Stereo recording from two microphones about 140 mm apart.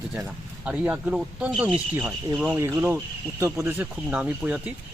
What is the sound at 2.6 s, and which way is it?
Speech, 20° right (ahead or behind).